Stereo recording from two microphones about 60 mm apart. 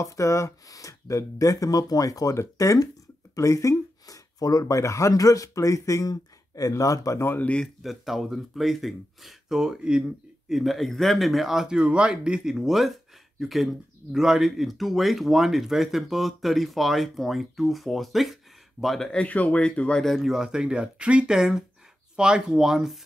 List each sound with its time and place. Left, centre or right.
0.0 s speech: left
3.3 s speech: left
6.7 s speech: left
7.6 s speech: centre
10.5 s speech: centre
19.2 s speech: left
20.0 s speech: centre
20.3 s speech: centre